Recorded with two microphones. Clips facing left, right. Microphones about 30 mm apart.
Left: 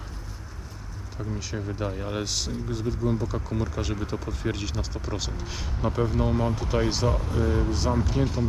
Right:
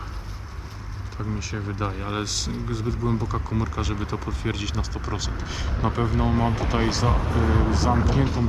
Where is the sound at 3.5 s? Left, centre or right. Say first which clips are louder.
Right 2 dB; centre.